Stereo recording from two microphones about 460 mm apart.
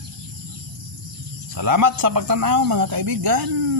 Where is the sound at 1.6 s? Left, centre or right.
Right.